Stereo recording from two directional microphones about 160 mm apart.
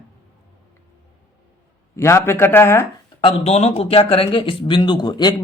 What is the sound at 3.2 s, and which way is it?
Speech, 35° left (ahead or behind).